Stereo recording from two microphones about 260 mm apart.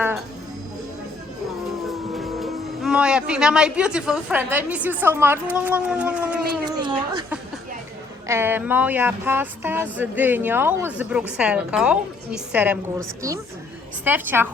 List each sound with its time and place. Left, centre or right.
1.9 s speech: centre
6.7 s speech: centre